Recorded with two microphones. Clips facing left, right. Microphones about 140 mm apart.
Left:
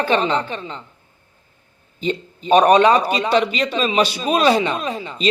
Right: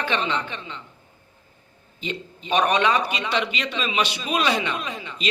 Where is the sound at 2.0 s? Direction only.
40° left (ahead or behind).